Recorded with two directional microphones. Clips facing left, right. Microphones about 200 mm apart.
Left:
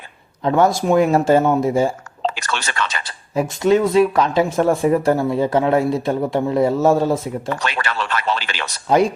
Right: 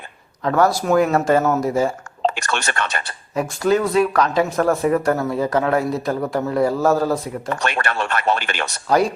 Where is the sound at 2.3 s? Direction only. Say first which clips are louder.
Right 1 dB; 55° right (ahead or behind).